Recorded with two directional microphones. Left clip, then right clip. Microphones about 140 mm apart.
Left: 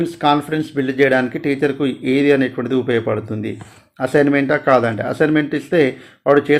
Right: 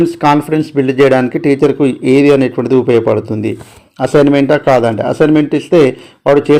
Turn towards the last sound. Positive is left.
turn(degrees=-35)  # may be behind; listen again after turning